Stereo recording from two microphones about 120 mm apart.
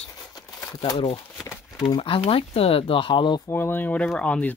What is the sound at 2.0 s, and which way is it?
Speech, 50° left (ahead or behind).